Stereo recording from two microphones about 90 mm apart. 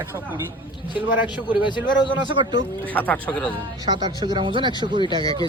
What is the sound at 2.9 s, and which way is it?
Speech, 20° left (ahead or behind).